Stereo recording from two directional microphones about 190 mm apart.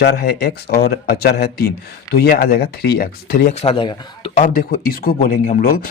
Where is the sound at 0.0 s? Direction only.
60° left (ahead or behind).